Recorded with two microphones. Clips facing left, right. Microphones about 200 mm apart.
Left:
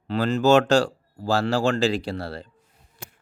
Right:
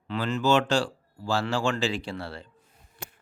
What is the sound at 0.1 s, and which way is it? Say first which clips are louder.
A man's voice: left 6 dB; 35° left (ahead or behind).